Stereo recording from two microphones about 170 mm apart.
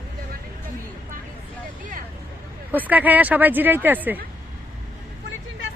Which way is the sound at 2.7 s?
10° right (ahead or behind).